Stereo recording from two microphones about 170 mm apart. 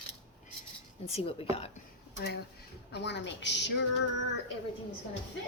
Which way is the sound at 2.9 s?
85° left.